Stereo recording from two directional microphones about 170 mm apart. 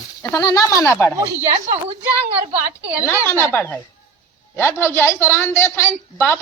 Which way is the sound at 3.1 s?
15° left (ahead or behind).